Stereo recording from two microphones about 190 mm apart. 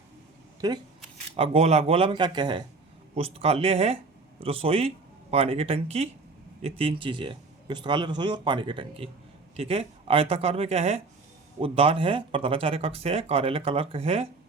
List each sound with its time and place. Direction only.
0.6 s speech: 20° right (ahead or behind)
1.4 s a woman's voice: 35° right (ahead or behind)